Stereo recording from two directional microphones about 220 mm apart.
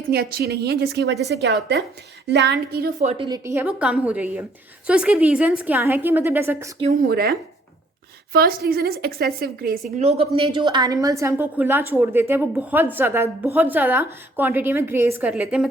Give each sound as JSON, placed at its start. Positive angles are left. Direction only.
{"t": 0.1, "sound": "a woman's voice", "side_deg": -45}
{"t": 3.0, "sound": "a woman's voice", "side_deg": -25}
{"t": 7.1, "sound": "a woman's voice", "side_deg": -45}
{"t": 10.0, "sound": "a woman's voice", "side_deg": -25}